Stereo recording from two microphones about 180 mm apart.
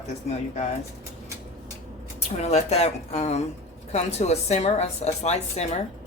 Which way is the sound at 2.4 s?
35° left (ahead or behind).